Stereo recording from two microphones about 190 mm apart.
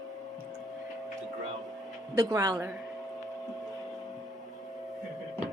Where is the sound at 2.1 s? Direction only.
20° right (ahead or behind).